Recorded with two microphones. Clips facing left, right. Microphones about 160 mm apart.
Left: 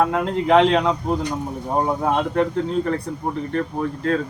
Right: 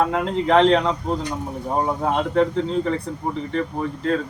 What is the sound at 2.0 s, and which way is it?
A man's voice, 5° left (ahead or behind).